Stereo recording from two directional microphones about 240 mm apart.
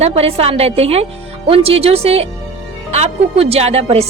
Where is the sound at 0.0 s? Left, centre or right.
Right.